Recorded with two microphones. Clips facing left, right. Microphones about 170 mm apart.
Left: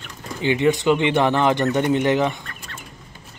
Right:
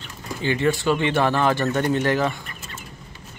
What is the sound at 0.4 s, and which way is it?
Speech, 20° left (ahead or behind).